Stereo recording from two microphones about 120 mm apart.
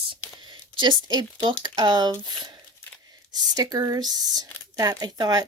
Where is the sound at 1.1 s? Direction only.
40° right (ahead or behind).